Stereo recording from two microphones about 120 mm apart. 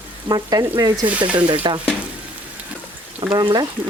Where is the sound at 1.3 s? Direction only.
45° right (ahead or behind).